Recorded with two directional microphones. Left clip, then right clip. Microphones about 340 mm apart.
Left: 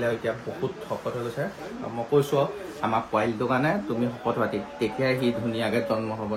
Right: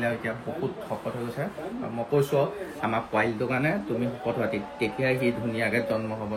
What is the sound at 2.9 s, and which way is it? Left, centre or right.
Speech, centre.